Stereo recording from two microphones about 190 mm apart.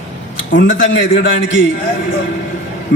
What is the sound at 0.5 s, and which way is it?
A man's voice, 70° left (ahead or behind).